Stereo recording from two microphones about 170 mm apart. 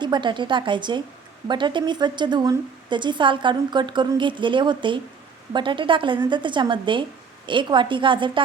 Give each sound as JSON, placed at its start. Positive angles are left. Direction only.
{"t": 0.0, "sound": "a woman's voice", "side_deg": -25}